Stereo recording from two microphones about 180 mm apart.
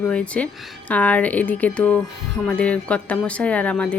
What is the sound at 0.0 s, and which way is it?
Speech, 5° left (ahead or behind).